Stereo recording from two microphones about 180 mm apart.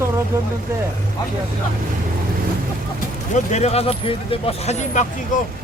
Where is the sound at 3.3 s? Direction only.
40° left (ahead or behind).